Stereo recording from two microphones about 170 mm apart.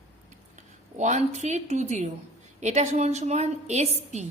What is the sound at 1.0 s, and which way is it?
A woman's voice, 45° right (ahead or behind).